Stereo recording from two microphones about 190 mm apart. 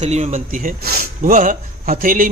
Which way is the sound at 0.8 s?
55° right (ahead or behind).